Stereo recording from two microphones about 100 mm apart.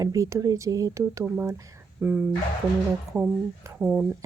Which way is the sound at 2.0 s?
10° right (ahead or behind).